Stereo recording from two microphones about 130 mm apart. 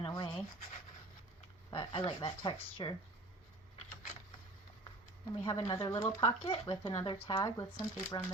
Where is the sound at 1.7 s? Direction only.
40° left (ahead or behind).